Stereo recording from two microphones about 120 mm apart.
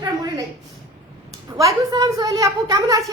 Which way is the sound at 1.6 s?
30° right (ahead or behind).